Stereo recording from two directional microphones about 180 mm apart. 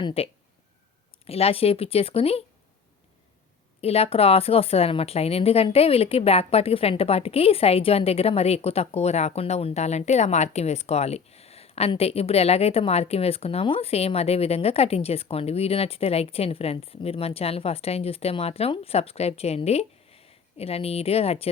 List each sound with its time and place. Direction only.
0.0 s a woman's voice: 30° left (ahead or behind)
1.3 s a woman's voice: 35° left (ahead or behind)
3.8 s a woman's voice: 35° left (ahead or behind)